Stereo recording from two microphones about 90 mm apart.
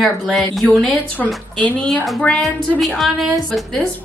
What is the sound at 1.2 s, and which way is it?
A woman's voice, 15° left (ahead or behind).